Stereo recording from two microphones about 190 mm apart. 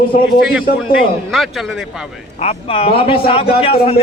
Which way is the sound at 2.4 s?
35° left (ahead or behind).